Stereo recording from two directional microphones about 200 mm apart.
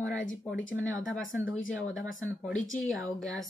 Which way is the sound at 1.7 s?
5° left (ahead or behind).